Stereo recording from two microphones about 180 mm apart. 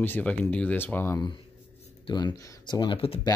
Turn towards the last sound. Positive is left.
turn(degrees=30)  # may be behind; listen again after turning